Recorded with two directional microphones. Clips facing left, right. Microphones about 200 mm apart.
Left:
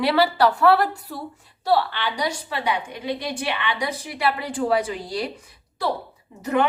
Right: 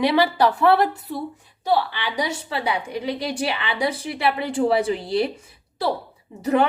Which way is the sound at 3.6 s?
30° right (ahead or behind).